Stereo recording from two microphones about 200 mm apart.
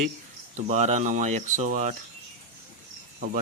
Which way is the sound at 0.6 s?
35° right (ahead or behind).